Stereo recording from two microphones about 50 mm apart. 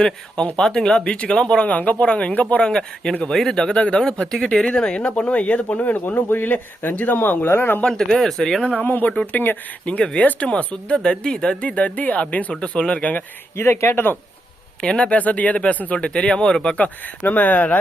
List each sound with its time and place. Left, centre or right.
0.0 s speech: centre
2.6 s speech: centre
4.0 s speech: centre; by 7.8 s left
7.9 s speech: centre
8.6 s speech: left
9.8 s speech: left
13.6 s speech: left
14.8 s speech: centre
15.2 s speech: left
16.6 s speech: left